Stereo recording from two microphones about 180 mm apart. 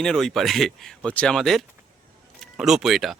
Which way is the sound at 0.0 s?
Centre (ahead or behind).